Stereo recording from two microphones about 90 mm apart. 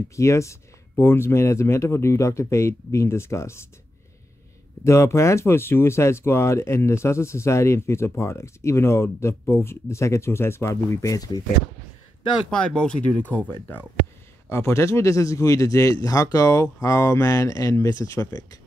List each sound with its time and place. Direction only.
0.1 s speech: 35° left (ahead or behind)
4.8 s speech: 30° left (ahead or behind)
12.4 s speech: 10° left (ahead or behind)
14.5 s speech: 30° left (ahead or behind)